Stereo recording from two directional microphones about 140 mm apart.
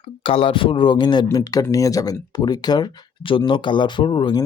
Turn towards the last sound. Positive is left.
turn(degrees=35)  # may be behind; listen again after turning